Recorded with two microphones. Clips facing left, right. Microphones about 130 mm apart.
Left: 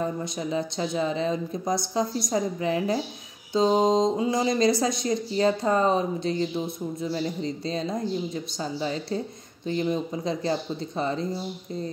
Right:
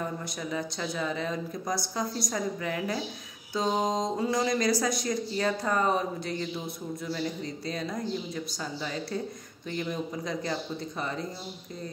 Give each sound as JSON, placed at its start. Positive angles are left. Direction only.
{"t": 0.0, "sound": "speech", "side_deg": 25}